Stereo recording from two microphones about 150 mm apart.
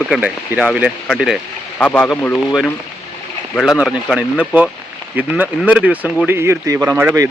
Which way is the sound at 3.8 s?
5° right (ahead or behind).